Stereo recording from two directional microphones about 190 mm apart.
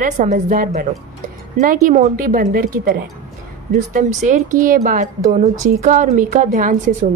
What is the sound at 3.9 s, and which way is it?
A woman's voice, 40° right (ahead or behind).